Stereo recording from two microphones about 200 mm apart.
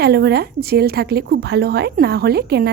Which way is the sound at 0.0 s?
55° right (ahead or behind).